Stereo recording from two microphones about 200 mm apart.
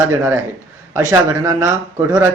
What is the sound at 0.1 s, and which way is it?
Speech, 15° right (ahead or behind).